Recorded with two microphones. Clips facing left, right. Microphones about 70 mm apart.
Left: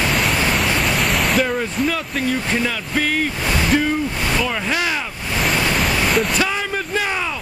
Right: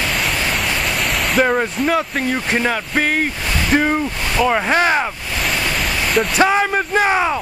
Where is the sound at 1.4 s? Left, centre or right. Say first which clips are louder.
Right 3 dB; right.